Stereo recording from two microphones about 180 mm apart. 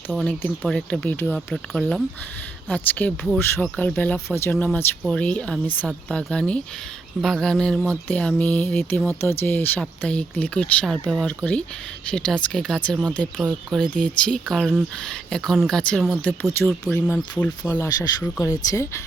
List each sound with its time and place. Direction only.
0.1 s speech: centre (ahead or behind)
16.2 s speech: 10° left (ahead or behind)